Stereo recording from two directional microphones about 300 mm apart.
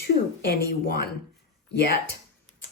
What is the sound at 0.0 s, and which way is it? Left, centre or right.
A woman's voice, left.